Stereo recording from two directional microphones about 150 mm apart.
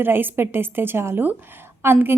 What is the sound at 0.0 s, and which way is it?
A woman's voice, 15° right (ahead or behind).